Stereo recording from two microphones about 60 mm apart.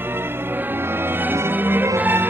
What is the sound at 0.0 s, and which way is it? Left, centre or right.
Music, right.